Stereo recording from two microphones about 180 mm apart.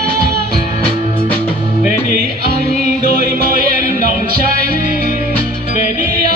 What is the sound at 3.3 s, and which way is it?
Music, 55° right (ahead or behind).